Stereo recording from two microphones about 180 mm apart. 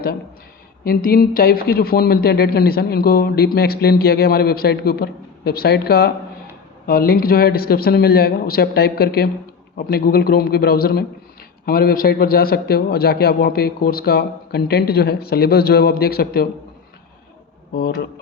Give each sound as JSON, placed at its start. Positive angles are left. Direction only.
{"t": 0.9, "sound": "a man's voice", "side_deg": 55}
{"t": 17.7, "sound": "a man's voice", "side_deg": 60}